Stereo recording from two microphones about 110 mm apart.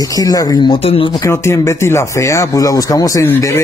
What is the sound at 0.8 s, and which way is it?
Speech, 65° left (ahead or behind).